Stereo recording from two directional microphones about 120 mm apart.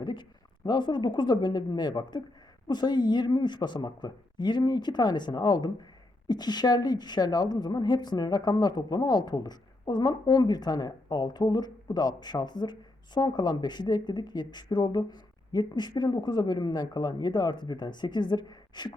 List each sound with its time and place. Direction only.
0.0 s a woman's voice: 40° left (ahead or behind)